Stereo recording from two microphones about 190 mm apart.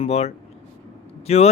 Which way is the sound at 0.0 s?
35° left (ahead or behind).